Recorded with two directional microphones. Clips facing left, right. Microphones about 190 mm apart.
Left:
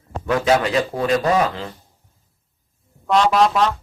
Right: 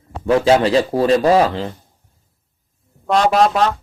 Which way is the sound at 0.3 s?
30° right (ahead or behind).